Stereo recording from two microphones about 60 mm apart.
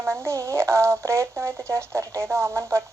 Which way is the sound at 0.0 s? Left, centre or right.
Right.